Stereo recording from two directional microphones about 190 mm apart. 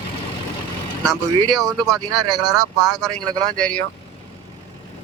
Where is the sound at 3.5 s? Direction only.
5° left (ahead or behind).